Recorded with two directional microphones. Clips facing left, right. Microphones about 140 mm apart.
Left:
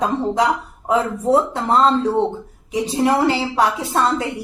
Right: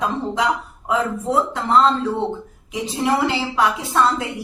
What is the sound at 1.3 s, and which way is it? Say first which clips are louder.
Speech: left 2 dB; 40° left (ahead or behind).